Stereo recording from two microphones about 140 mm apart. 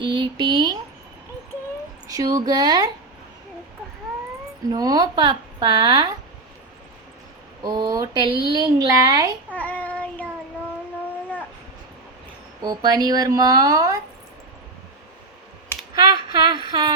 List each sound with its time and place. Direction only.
0.0 s speech: 35° right (ahead or behind)
2.0 s a sound: 25° right (ahead or behind)
2.5 s speech: 30° right (ahead or behind)
4.7 s a woman's voice: 30° right (ahead or behind)
7.6 s a woman's voice: 30° right (ahead or behind)
9.5 s child singing: 10° left (ahead or behind)
12.6 s a woman's voice: 30° right (ahead or behind)
16.0 s speech: 35° right (ahead or behind)